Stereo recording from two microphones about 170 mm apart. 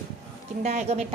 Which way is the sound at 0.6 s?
45° right (ahead or behind).